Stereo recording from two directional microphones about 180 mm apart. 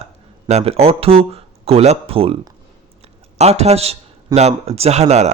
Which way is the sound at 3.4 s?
35° right (ahead or behind).